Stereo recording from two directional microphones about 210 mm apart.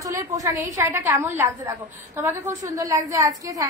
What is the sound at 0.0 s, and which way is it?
A woman's voice, 15° right (ahead or behind).